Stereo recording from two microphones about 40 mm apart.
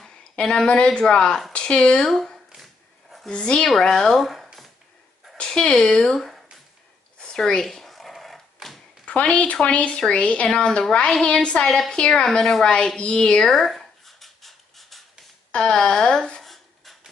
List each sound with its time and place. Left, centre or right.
0.0 s a sound: left
0.8 s speech: centre
2.6 s dog: centre
3.3 s speech: left
3.7 s speech: centre
4.2 s speech: centre
5.4 s a sound: left
5.7 s speech: left
7.2 s a sound: centre
7.6 s dog: centre
9.0 s speech: left
13.4 s a sound: centre
15.5 s speech: centre
16.3 s rub: centre